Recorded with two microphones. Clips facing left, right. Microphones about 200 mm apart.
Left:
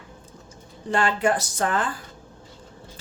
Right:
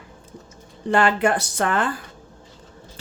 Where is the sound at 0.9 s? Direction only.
65° right (ahead or behind).